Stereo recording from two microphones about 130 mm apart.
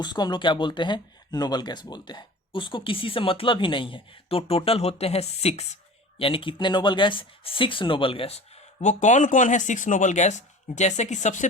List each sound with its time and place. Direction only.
0.0 s speech: 35° left (ahead or behind)
8.8 s speech: 70° left (ahead or behind)